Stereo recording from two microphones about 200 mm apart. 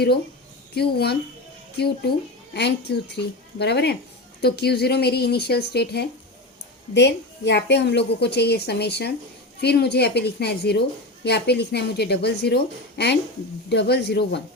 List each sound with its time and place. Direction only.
0.7 s a woman's voice: 55° left (ahead or behind)